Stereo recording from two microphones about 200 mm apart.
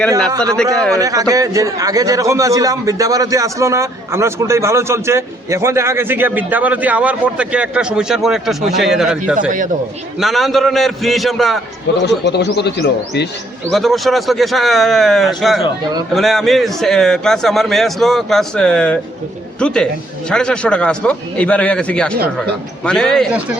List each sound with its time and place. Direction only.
0.5 s a man's voice: 5° left (ahead or behind)
0.9 s a man's voice: 15° right (ahead or behind); by 11.6 s centre (ahead or behind)
12.0 s speech: 55° left (ahead or behind)
13.7 s a man's voice: centre (ahead or behind)